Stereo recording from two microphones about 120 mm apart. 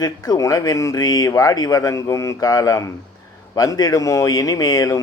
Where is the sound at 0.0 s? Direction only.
30° left (ahead or behind).